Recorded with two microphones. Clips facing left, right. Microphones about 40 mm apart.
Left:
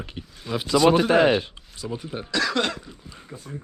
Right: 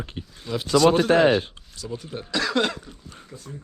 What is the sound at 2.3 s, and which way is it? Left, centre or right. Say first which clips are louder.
Cough: right 1 dB; centre.